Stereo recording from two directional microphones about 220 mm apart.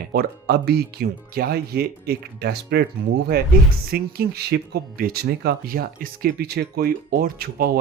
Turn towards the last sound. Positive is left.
turn(degrees=-40)  # may be behind; listen again after turning